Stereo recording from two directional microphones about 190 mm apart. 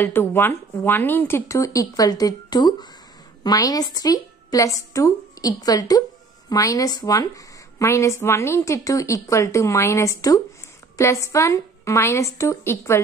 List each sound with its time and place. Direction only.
0.0 s a woman's voice: 10° left (ahead or behind)